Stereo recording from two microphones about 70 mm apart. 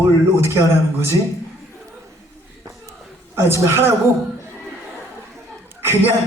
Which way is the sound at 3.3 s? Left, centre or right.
Right.